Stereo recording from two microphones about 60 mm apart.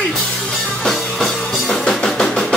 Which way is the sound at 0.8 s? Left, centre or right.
Centre.